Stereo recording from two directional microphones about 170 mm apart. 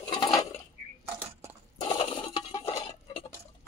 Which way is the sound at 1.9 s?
25° left (ahead or behind).